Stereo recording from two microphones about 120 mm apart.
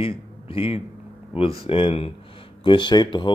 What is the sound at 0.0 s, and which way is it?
A man's voice, 50° left (ahead or behind).